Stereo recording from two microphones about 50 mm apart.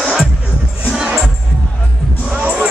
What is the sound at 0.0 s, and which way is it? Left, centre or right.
Music, centre.